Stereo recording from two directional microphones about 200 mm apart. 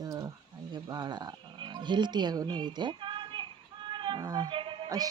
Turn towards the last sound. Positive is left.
turn(degrees=-20)  # may be behind; listen again after turning